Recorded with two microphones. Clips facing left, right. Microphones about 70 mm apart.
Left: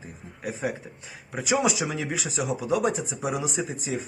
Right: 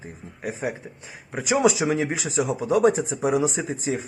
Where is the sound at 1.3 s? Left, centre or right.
Right.